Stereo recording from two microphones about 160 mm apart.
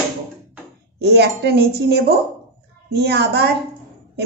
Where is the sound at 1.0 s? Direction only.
90° right.